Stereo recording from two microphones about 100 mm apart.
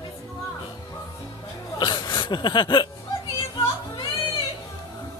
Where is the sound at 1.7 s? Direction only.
50° left (ahead or behind).